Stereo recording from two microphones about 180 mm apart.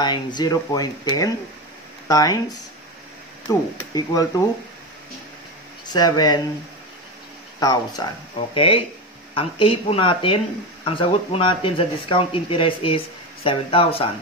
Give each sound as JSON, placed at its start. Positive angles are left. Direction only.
{"t": 0.0, "sound": "speech", "side_deg": 25}
{"t": 5.9, "sound": "speech", "side_deg": 20}
{"t": 7.6, "sound": "speech", "side_deg": 20}